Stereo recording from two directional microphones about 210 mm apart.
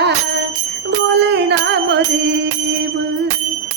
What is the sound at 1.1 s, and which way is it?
Music, 55° right (ahead or behind).